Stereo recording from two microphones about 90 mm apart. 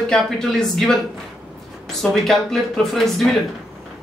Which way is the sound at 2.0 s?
5° left (ahead or behind).